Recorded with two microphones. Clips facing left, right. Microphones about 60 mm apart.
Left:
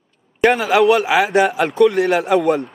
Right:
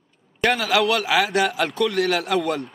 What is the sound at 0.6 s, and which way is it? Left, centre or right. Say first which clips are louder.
A man's voice: left 7 dB; centre.